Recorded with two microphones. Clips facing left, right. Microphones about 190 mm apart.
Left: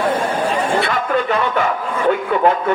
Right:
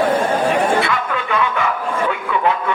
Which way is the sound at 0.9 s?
40° left (ahead or behind).